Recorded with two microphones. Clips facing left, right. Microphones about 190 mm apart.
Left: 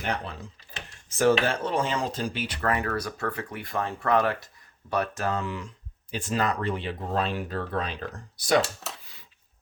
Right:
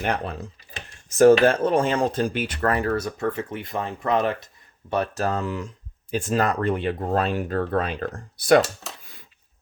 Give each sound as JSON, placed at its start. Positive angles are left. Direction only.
{"t": 0.0, "sound": "speech", "side_deg": -55}
{"t": 1.2, "sound": "cutlery", "side_deg": -45}
{"t": 4.9, "sound": "speech", "side_deg": -30}